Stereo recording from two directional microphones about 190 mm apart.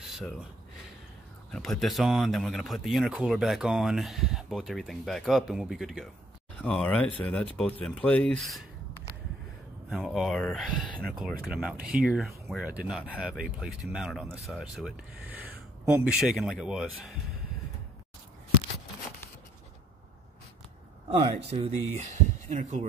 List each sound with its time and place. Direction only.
1.5 s speech: centre (ahead or behind)
9.8 s speech: centre (ahead or behind)
21.2 s speech: 35° right (ahead or behind)